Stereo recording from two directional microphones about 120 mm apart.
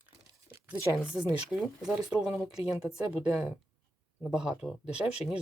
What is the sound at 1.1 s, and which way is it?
Speech, 5° right (ahead or behind).